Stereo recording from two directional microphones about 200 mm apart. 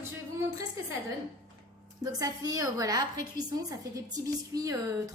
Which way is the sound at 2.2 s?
20° right (ahead or behind).